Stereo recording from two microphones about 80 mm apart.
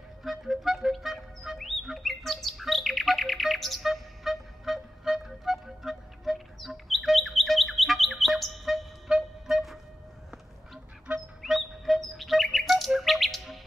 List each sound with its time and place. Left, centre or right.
0.2 s music: centre
11.1 s duck: centre
11.4 s chirp: centre